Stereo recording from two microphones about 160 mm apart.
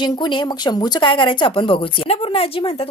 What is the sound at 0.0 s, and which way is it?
Speech, 30° left (ahead or behind).